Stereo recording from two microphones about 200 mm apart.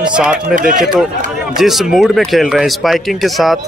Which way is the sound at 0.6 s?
40° right (ahead or behind).